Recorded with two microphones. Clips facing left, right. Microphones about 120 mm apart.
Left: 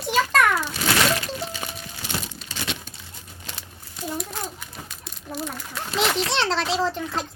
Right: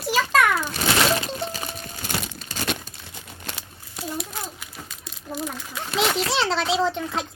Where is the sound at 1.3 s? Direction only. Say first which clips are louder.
Right 1 dB; 40° right (ahead or behind).